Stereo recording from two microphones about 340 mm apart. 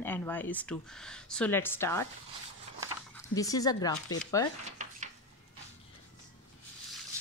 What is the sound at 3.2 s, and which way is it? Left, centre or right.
Speech, centre.